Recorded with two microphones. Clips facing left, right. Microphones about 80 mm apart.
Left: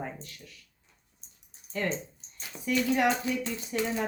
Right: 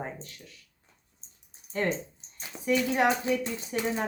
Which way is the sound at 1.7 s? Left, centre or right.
Right.